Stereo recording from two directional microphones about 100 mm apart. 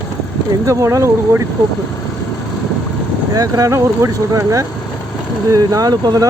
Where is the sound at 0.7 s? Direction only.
30° right (ahead or behind).